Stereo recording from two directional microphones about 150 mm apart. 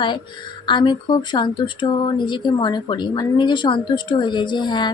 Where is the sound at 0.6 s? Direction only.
30° left (ahead or behind).